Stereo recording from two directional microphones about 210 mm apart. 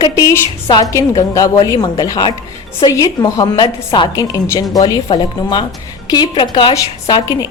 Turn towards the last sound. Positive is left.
turn(degrees=15)  # may be behind; listen again after turning